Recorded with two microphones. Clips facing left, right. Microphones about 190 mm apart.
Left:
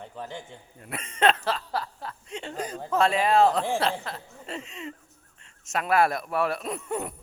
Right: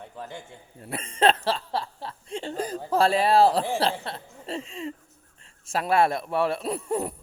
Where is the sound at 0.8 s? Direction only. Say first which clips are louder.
Right 2 dB; 30° right (ahead or behind).